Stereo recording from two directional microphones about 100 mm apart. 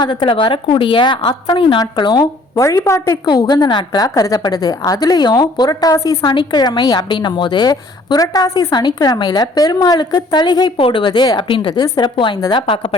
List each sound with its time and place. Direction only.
0.0 s a woman's voice: 55° left (ahead or behind)
1.8 s a woman's voice: 45° left (ahead or behind)
2.6 s a woman's voice: 30° left (ahead or behind)
3.2 s a woman's voice: 45° left (ahead or behind)
10.8 s speech: 70° left (ahead or behind)
11.0 s a woman's voice: 45° left (ahead or behind)
11.7 s a woman's voice: 45° left (ahead or behind)